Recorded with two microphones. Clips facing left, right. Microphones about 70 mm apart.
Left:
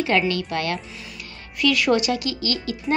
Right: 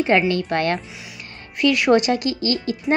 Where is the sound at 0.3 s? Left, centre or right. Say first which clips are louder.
Right 4 dB; right.